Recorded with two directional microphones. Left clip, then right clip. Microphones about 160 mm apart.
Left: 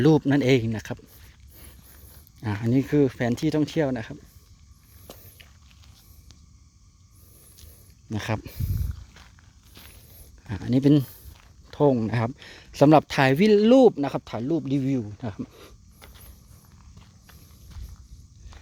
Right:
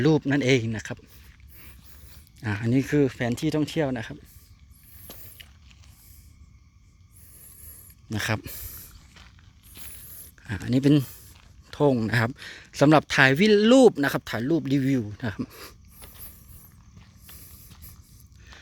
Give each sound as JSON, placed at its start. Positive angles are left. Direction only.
{"t": 0.0, "sound": "speech", "side_deg": 25}
{"t": 2.4, "sound": "speech", "side_deg": 5}
{"t": 5.1, "sound": "biting", "side_deg": 10}
{"t": 8.1, "sound": "speech", "side_deg": 5}
{"t": 9.7, "sound": "mechanisms", "side_deg": 0}
{"t": 10.4, "sound": "speech", "side_deg": 10}
{"t": 17.0, "sound": "clip-clop", "side_deg": 0}